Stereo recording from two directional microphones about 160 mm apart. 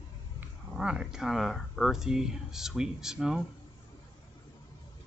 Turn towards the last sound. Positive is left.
turn(degrees=-5)  # may be behind; listen again after turning